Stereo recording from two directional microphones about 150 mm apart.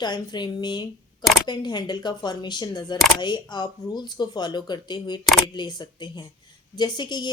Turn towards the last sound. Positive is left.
turn(degrees=30)  # may be behind; listen again after turning